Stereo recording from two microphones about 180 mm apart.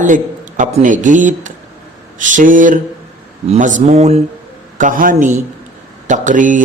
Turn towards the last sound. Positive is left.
turn(degrees=-45)  # may be behind; listen again after turning